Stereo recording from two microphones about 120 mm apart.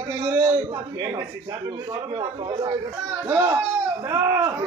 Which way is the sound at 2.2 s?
40° right (ahead or behind).